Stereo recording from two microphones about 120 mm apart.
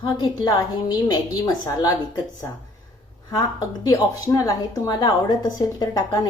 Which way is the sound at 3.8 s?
25° left (ahead or behind).